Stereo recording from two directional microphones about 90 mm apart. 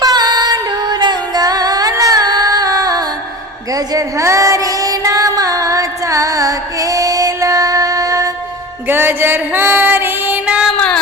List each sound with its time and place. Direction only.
0.0 s music: 50° right (ahead or behind)
8.9 s music: 25° right (ahead or behind)
10.8 s a sound: 10° left (ahead or behind)